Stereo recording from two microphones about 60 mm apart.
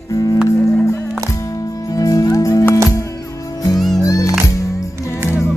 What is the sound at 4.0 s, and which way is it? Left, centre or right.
Music, left.